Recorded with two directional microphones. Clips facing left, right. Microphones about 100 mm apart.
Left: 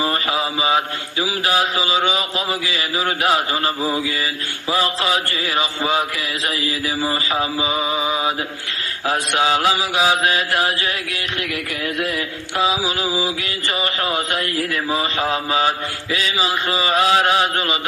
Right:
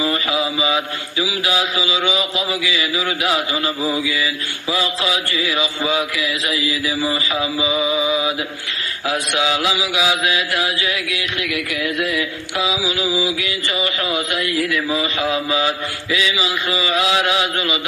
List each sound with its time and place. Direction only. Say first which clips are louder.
0.0 s mantra: right 1 dB; 35° left (ahead or behind)